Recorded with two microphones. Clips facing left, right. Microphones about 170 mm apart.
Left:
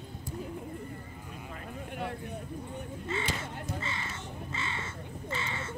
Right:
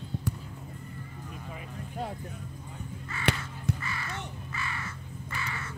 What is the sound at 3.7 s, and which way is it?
Crow, 25° left (ahead or behind).